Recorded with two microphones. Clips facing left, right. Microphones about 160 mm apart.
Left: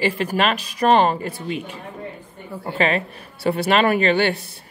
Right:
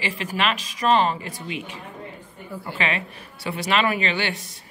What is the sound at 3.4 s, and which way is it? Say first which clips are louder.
Speech: left 5 dB; 55° left (ahead or behind).